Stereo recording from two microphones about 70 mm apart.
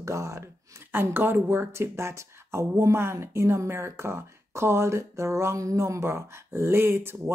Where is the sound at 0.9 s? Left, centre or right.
Right.